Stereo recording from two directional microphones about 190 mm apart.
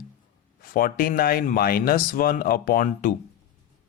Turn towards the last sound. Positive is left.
turn(degrees=45)  # may be behind; listen again after turning